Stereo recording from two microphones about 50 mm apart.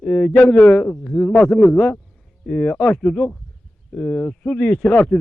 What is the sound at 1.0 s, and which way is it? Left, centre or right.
A man's voice, centre.